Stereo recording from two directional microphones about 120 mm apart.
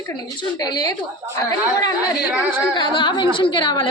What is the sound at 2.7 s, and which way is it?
A woman's voice, 40° left (ahead or behind).